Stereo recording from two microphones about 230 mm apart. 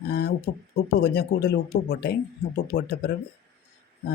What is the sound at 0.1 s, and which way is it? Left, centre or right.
Speech, left.